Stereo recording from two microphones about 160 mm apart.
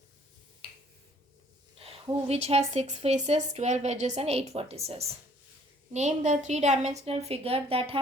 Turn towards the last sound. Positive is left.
turn(degrees=-35)  # may be behind; listen again after turning